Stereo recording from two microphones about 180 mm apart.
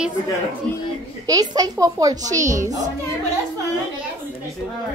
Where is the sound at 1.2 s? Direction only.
20° right (ahead or behind).